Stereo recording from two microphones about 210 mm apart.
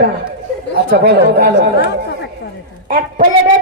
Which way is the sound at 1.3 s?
50° right (ahead or behind).